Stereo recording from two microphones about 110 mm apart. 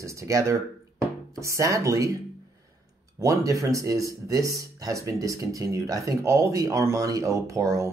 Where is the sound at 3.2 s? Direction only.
30° right (ahead or behind).